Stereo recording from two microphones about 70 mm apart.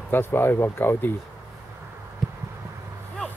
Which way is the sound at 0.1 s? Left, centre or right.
Left.